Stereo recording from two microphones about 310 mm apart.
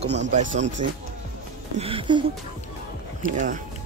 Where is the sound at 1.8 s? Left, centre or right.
Centre.